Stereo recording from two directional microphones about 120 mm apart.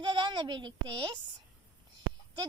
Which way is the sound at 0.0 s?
40° right (ahead or behind).